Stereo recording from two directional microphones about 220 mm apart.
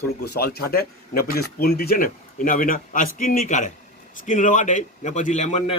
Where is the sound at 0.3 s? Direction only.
45° left (ahead or behind).